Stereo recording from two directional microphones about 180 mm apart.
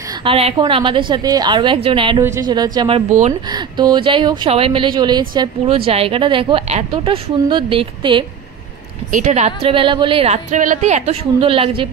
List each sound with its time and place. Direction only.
0.2 s a woman's voice: 30° right (ahead or behind)
9.1 s a woman's voice: 40° right (ahead or behind)